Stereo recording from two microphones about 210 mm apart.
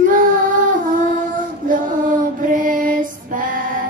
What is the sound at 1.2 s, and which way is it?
Female singing, 40° right (ahead or behind).